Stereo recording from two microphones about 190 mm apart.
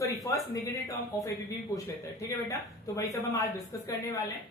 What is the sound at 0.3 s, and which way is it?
Speech, 15° left (ahead or behind).